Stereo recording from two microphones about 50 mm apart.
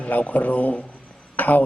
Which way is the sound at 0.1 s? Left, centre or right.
Left.